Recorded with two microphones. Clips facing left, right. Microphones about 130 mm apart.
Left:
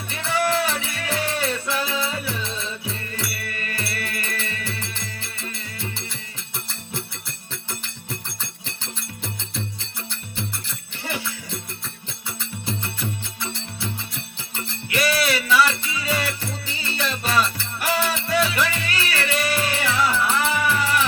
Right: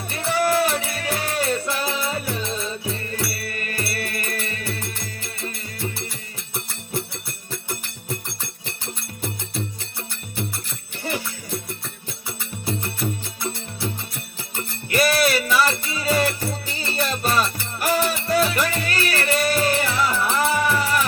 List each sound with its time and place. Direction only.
0.1 s music: 45° right (ahead or behind)
11.1 s music: 35° right (ahead or behind)
12.8 s music: 40° right (ahead or behind)
14.5 s music: 45° right (ahead or behind)